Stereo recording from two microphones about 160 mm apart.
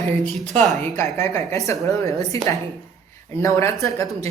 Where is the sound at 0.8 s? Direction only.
15° left (ahead or behind).